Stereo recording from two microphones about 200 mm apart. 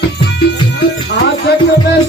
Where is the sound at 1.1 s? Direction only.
55° left (ahead or behind).